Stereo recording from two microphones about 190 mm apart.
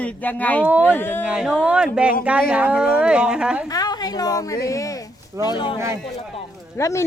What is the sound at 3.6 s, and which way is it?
A woman's voice, 20° left (ahead or behind).